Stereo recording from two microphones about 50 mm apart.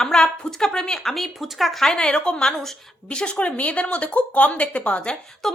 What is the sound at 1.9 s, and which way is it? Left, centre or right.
Speech, centre.